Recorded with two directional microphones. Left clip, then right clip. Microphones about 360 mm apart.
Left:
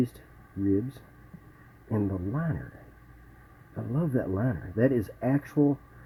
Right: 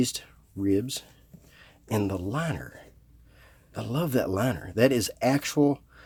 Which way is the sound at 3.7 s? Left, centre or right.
Right.